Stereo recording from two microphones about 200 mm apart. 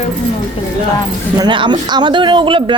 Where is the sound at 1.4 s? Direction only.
25° right (ahead or behind).